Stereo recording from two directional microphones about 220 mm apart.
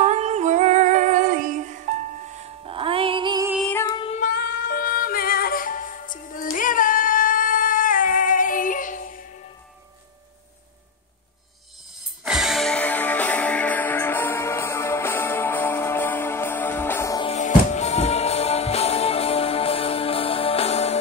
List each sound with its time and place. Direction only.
0.0 s female singing: 30° right (ahead or behind)
3.8 s female singing: 20° left (ahead or behind)
4.2 s music: 40° left (ahead or behind)
12.3 s music: centre (ahead or behind); by 17.3 s 15° left (ahead or behind)
17.3 s music: 35° left (ahead or behind)